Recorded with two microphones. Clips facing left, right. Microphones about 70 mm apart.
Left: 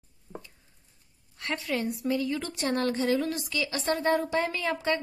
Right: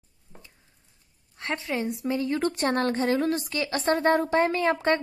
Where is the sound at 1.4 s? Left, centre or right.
Right.